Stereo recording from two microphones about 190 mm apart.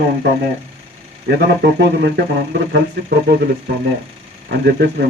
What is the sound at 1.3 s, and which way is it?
A man's voice, 65° right (ahead or behind).